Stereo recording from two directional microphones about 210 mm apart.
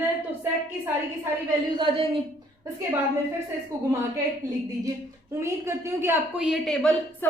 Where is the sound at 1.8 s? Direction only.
25° right (ahead or behind).